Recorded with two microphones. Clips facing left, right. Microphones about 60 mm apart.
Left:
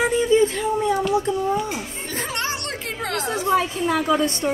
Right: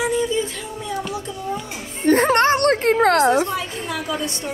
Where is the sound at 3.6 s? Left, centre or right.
Left.